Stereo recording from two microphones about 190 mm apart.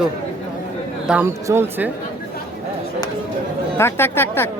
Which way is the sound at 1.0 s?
10° right (ahead or behind).